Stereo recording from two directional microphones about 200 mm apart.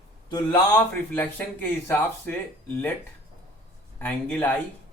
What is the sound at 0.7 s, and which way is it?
Speech, 10° left (ahead or behind).